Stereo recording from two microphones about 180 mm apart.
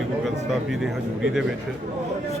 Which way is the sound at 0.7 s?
Centre (ahead or behind).